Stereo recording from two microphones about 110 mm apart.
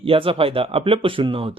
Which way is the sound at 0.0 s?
55° right (ahead or behind).